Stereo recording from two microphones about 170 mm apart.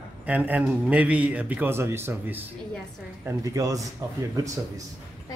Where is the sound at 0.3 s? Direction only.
10° right (ahead or behind).